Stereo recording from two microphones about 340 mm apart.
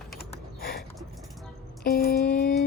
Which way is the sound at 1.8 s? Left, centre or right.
Left.